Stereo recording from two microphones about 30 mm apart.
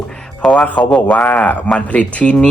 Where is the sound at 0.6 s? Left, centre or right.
Left.